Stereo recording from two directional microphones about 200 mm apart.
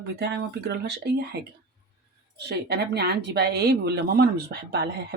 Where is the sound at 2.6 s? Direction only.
55° right (ahead or behind).